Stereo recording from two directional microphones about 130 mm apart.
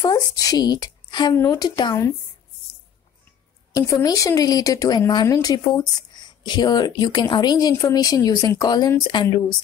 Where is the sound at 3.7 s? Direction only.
25° left (ahead or behind).